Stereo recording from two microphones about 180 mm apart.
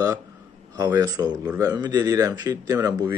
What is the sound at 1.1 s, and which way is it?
Speech, 20° right (ahead or behind).